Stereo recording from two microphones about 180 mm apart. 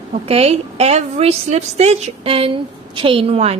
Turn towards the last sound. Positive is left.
turn(degrees=-35)  # may be behind; listen again after turning